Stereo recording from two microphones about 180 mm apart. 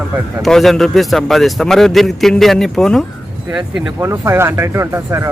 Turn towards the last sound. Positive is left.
turn(degrees=-15)  # may be behind; listen again after turning